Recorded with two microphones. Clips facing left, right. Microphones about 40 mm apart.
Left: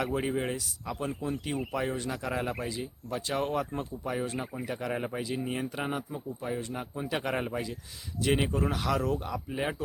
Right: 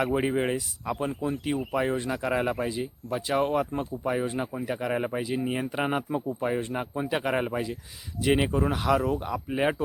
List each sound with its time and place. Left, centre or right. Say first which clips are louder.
0.0 s speech: right 5 dB; centre
1.2 s speech: right 4 dB; centre
5.8 s speech: right 6 dB; right
7.1 s speech: right 4 dB; centre
9.5 s speech: right 8 dB; right